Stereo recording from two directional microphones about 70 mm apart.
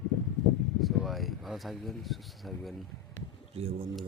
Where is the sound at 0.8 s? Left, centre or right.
Centre.